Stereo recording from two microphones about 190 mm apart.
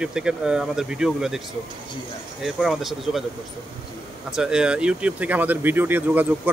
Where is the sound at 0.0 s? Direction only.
5° right (ahead or behind).